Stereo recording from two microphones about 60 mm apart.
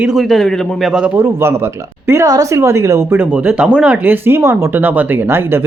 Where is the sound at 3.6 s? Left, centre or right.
Centre.